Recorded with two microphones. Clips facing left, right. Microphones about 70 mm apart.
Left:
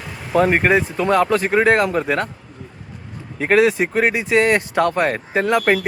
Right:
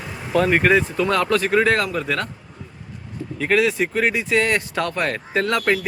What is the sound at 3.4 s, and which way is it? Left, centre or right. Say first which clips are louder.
Speech: left 4 dB; left.